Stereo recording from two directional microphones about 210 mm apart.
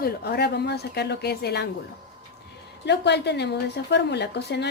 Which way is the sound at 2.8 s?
55° left (ahead or behind).